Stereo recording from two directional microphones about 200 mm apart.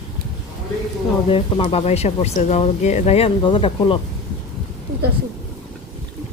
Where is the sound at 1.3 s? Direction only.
25° left (ahead or behind).